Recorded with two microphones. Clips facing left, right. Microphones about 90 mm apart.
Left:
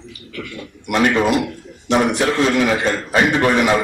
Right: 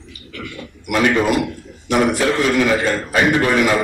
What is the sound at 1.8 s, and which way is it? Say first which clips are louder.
A man's voice: even; 20° left (ahead or behind).